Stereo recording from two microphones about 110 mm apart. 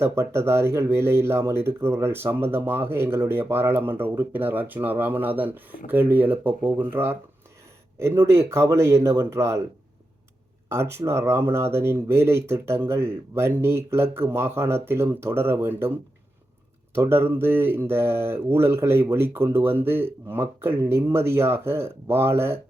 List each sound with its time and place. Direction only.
0.0 s speech: 25° right (ahead or behind)
10.7 s speech: 25° right (ahead or behind)
16.9 s speech: 20° right (ahead or behind)